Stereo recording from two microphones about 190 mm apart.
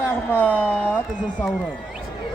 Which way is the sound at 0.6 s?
10° left (ahead or behind).